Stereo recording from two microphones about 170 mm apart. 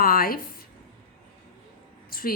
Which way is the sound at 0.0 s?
60° left (ahead or behind).